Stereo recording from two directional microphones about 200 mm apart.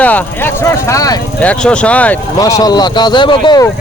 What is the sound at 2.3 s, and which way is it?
Speech, 20° left (ahead or behind).